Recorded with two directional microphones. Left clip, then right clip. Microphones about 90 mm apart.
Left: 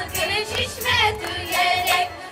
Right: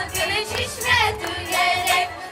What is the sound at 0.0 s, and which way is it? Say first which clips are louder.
Music: even; 25° right (ahead or behind).